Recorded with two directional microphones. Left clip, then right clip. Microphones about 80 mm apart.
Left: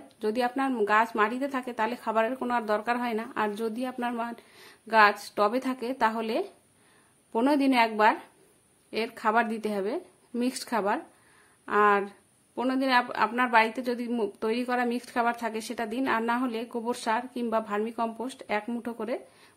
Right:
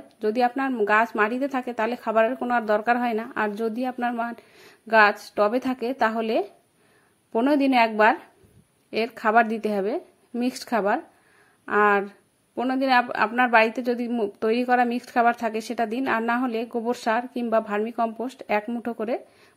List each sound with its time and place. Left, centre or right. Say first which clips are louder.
0.2 s a woman's voice: right 5 dB; right
3.7 s speech: right 5 dB; right
5.0 s a woman's voice: right 3 dB; right
8.9 s a woman's voice: right 6 dB; right
13.6 s a woman's voice: right 4 dB; right